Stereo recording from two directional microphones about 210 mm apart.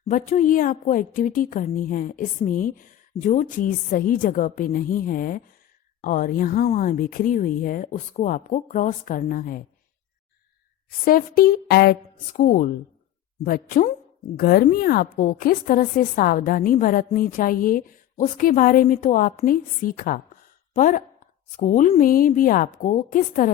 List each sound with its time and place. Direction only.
0.1 s a woman's voice: 35° left (ahead or behind)
10.8 s a woman's voice: 45° left (ahead or behind)